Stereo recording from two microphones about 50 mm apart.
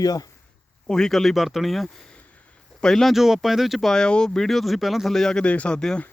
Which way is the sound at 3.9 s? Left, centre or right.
Centre.